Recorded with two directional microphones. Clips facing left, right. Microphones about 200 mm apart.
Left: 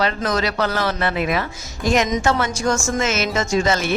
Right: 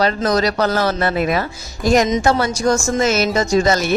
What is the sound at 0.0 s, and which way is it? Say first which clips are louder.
A woman's voice: right 4 dB; 40° right (ahead or behind).